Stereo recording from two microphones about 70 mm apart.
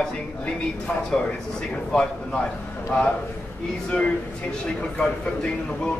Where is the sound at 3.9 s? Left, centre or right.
Centre.